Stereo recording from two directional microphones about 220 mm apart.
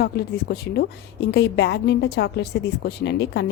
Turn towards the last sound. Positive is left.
turn(degrees=50)  # may be behind; listen again after turning